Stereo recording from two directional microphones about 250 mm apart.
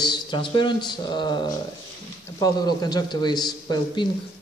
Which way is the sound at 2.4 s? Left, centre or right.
Centre.